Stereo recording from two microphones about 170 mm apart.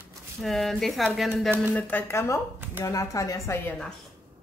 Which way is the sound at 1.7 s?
10° left (ahead or behind).